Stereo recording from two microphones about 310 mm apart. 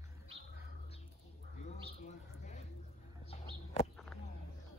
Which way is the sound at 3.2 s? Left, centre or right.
Centre.